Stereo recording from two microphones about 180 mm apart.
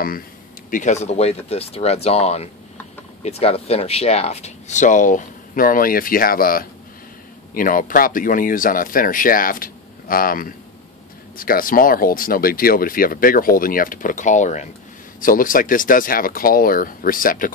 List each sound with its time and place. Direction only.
0.7 s speech: 45° left (ahead or behind)